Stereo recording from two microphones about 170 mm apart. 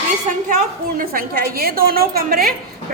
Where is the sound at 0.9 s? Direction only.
55° right (ahead or behind).